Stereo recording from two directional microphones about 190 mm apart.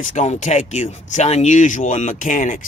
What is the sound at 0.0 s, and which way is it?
Speech, 40° left (ahead or behind).